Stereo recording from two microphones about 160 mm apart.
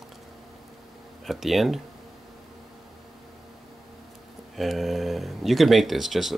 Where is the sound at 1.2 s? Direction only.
Centre (ahead or behind).